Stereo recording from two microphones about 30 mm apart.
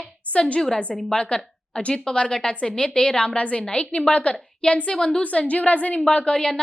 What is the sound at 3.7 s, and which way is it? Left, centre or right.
A woman's voice, left.